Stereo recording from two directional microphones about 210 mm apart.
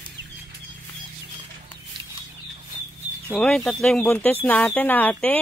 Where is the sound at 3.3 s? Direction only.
Centre (ahead or behind).